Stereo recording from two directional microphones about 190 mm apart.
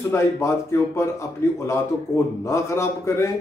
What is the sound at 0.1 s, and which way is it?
Speech, 15° left (ahead or behind).